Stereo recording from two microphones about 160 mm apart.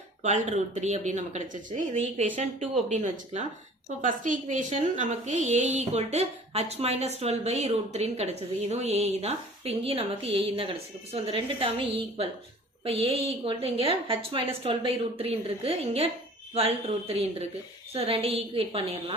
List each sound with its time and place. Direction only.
0.2 s a woman's voice: 45° right (ahead or behind)
12.8 s a woman's voice: 35° right (ahead or behind)